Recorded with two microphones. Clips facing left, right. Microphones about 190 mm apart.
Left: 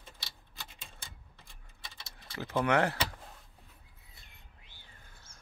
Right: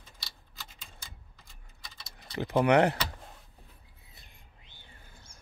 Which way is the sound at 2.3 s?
15° right (ahead or behind).